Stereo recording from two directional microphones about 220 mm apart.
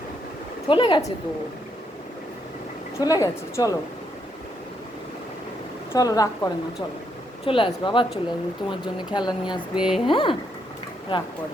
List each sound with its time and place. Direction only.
0.7 s speech: 20° left (ahead or behind)
3.0 s a woman's voice: 15° left (ahead or behind)
5.9 s a woman's voice: 15° left (ahead or behind)
9.7 s speech: 5° right (ahead or behind)
10.1 s speech: 25° left (ahead or behind)